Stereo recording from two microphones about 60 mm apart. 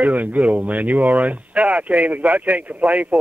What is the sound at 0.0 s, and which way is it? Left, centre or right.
Speech, right.